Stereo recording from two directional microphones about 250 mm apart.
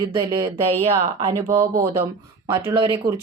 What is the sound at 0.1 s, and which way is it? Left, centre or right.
Speech, centre.